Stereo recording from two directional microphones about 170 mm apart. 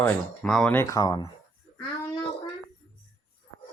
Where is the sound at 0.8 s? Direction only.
20° left (ahead or behind).